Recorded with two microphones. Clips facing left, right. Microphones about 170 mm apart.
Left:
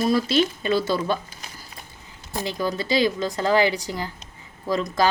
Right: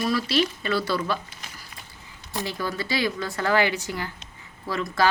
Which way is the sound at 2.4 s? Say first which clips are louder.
Left 4 dB; 15° left (ahead or behind).